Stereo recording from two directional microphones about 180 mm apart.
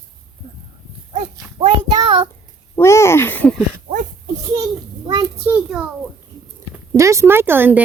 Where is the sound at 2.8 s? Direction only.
15° left (ahead or behind).